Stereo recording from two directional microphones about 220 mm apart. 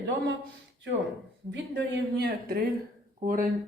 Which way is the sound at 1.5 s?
50° right (ahead or behind).